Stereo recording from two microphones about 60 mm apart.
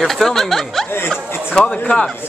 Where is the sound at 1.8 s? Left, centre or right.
Centre.